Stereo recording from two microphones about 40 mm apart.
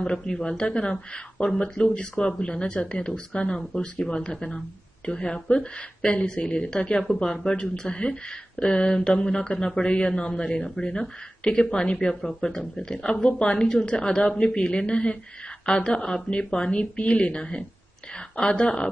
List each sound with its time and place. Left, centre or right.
0.0 s speech: centre
2.0 s speech: left
5.6 s a woman's voice: left